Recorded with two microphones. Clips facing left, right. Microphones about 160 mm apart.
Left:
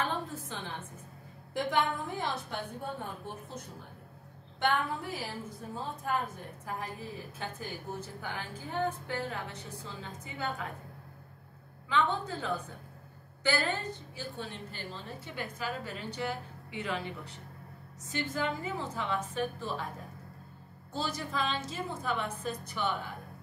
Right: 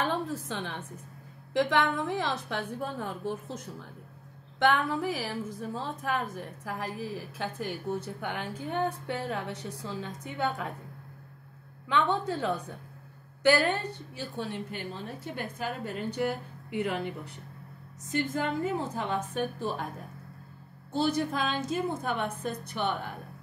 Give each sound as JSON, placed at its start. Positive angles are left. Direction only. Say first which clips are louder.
{"t": 0.0, "sound": "a sound", "louder": "right 4 dB", "side_deg": -75}
{"t": 1.5, "sound": "a woman's voice", "louder": "right 4 dB", "side_deg": -85}
{"t": 8.2, "sound": "a woman's voice", "louder": "right 5 dB", "side_deg": -65}
{"t": 11.9, "sound": "a woman's voice", "louder": "right 3 dB", "side_deg": -65}
{"t": 18.1, "sound": "a woman's voice", "louder": "right 4 dB", "side_deg": -60}
{"t": 21.1, "sound": "a woman's voice", "louder": "right 5 dB", "side_deg": -60}